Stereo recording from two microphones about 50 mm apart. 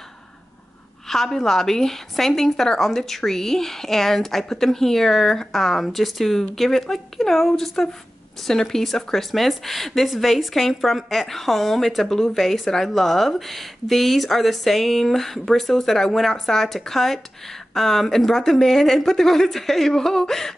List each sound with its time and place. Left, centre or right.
1.0 s a woman's voice: centre